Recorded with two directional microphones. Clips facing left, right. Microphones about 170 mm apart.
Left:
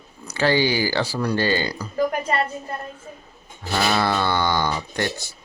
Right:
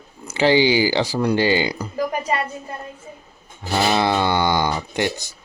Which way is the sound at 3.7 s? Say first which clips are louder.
Right 3 dB; 20° right (ahead or behind).